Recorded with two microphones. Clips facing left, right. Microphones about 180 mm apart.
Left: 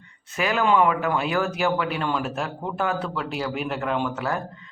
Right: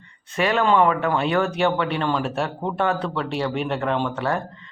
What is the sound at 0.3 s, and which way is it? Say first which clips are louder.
Speech: right 2 dB; 5° left (ahead or behind).